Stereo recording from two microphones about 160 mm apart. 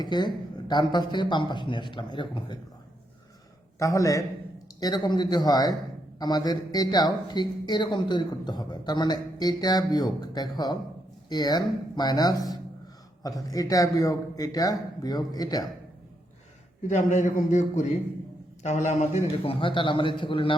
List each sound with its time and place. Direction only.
0.0 s a man's voice: 25° left (ahead or behind)
3.8 s a man's voice: 20° left (ahead or behind)
16.9 s a man's voice: 50° left (ahead or behind); by 20.6 s 35° left (ahead or behind)